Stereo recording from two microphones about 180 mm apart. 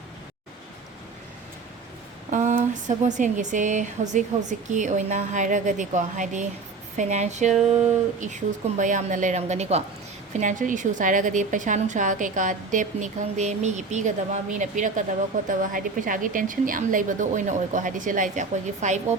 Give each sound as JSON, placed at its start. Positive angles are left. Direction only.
{"t": 2.3, "sound": "a woman's voice", "side_deg": -45}
{"t": 8.8, "sound": "a woman's voice", "side_deg": -45}